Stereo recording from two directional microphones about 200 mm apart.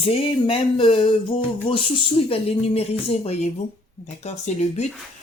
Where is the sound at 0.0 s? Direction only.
25° left (ahead or behind).